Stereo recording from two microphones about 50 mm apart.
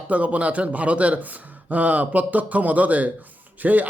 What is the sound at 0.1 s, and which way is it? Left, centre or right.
A man's voice, right.